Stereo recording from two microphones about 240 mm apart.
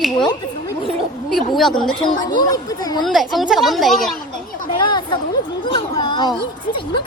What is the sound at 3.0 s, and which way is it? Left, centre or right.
A woman's voice, centre.